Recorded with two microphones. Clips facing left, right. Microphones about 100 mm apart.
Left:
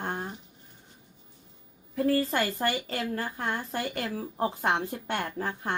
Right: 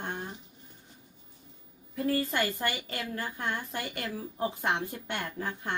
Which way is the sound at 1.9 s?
35° left (ahead or behind).